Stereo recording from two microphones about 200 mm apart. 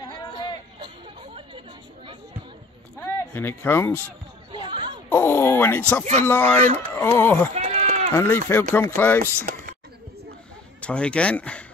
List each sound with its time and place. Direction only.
0.7 s chatter: 25° right (ahead or behind)
3.0 s speech: 10° left (ahead or behind)
4.6 s a sound: 20° right (ahead or behind)
5.1 s speech: 10° left (ahead or behind)
7.5 s sheep: 35° right (ahead or behind)
8.2 s speech: 10° left (ahead or behind)
9.5 s a sound: 45° right (ahead or behind)
10.8 s speech: 5° left (ahead or behind)